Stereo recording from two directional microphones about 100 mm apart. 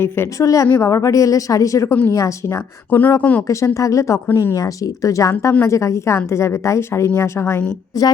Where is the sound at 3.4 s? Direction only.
35° left (ahead or behind).